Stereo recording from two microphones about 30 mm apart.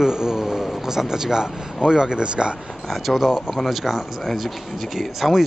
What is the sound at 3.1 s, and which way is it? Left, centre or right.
Speech, centre.